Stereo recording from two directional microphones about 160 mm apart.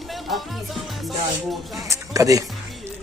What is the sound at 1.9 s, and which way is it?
Speech, 20° right (ahead or behind).